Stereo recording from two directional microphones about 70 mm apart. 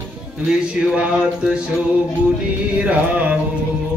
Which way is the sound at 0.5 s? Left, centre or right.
Centre.